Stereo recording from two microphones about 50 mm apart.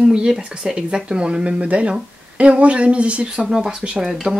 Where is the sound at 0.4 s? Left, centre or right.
Centre.